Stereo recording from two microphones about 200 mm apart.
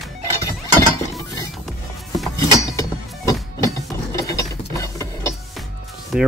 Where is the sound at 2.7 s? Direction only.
15° left (ahead or behind).